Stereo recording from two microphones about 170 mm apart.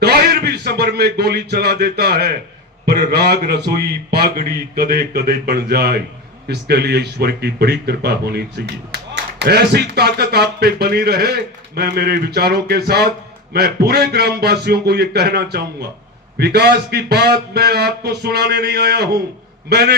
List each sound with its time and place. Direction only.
0.0 s a man's voice: 70° right (ahead or behind)